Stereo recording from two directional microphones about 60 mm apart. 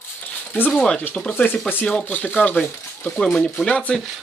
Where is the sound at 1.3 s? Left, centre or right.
Left.